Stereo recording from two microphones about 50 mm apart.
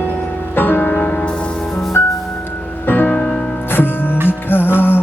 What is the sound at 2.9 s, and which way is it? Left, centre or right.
Music, left.